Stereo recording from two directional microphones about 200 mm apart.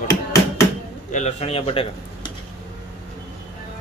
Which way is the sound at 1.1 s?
35° left (ahead or behind).